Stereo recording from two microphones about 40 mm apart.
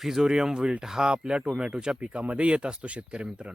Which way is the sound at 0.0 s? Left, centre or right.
Centre.